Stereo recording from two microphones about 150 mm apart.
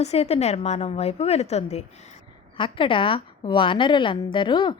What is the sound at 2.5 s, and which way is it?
A woman's voice, 35° left (ahead or behind).